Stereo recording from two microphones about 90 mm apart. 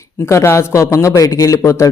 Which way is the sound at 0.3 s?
30° left (ahead or behind).